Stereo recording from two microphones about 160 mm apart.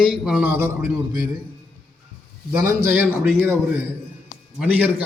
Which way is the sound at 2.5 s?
15° right (ahead or behind).